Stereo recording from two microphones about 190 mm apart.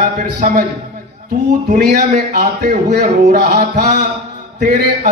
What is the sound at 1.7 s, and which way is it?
A man's voice, 40° right (ahead or behind).